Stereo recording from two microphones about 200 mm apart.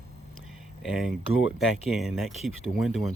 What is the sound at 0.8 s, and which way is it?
Speech, centre (ahead or behind).